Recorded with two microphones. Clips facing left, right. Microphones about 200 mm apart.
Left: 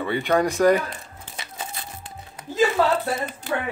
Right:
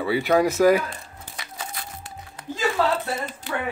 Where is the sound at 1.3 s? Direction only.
25° left (ahead or behind).